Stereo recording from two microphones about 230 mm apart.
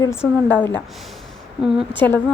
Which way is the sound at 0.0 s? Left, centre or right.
Centre.